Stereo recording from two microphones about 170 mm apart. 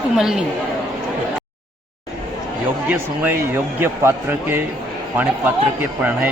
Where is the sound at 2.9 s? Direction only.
10° right (ahead or behind).